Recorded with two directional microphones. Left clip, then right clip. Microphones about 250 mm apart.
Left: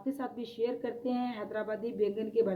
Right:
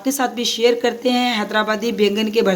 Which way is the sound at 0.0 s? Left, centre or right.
Right.